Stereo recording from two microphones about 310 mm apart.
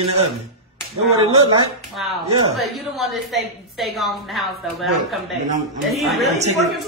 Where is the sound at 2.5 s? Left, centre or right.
Centre.